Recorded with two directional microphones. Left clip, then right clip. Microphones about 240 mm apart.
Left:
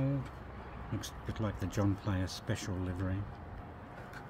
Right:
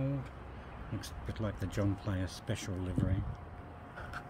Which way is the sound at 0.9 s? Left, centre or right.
Centre.